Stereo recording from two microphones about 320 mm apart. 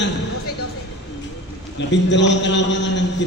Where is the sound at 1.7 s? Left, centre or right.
Left.